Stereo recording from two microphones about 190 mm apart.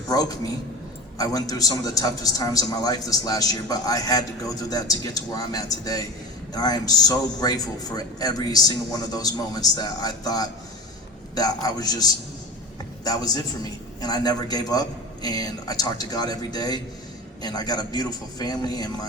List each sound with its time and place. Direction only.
0.1 s a man's voice: 20° left (ahead or behind)